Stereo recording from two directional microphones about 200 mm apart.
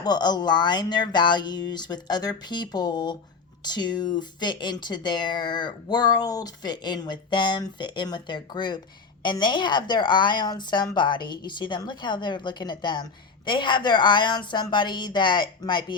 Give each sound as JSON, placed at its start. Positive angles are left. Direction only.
{"t": 0.0, "sound": "a woman's voice", "side_deg": 20}